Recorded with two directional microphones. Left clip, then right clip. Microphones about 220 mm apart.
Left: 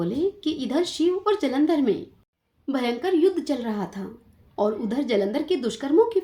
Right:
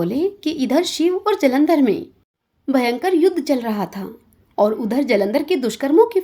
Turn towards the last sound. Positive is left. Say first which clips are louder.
# right 6 dB
turn(degrees=-35)  # may be behind; listen again after turning